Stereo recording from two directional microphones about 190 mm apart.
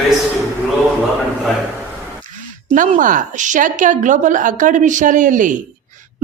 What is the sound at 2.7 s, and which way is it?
A woman's voice, 45° right (ahead or behind).